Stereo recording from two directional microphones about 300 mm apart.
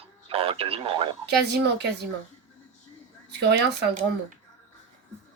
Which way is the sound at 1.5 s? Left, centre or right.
Right.